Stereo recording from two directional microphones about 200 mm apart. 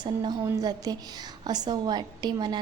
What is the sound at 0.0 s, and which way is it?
A woman's voice, 20° right (ahead or behind).